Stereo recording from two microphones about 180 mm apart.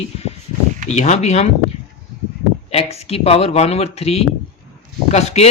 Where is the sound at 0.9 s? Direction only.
40° left (ahead or behind).